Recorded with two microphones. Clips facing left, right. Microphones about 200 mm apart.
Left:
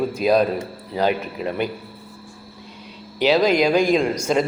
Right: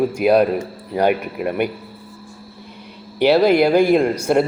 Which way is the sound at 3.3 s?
10° right (ahead or behind).